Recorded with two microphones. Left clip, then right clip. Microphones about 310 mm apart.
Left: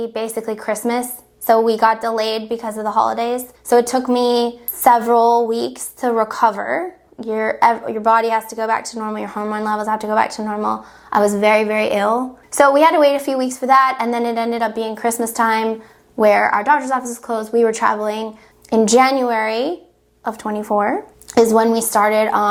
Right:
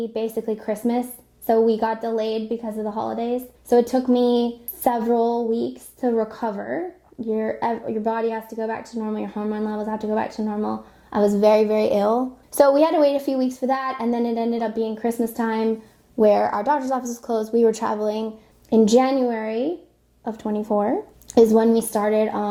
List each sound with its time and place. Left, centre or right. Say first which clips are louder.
0.1 s a woman's voice: left 2 dB; left
11.3 s a woman's voice: left 2 dB; left
16.1 s a woman's voice: left 4 dB; left